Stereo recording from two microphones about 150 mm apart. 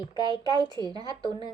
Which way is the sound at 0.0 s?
30° left (ahead or behind).